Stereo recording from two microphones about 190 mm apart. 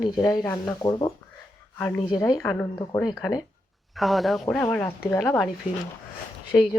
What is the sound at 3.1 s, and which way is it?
Speech, 20° left (ahead or behind).